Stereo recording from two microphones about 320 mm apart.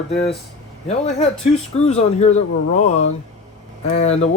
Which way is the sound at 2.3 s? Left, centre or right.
Left.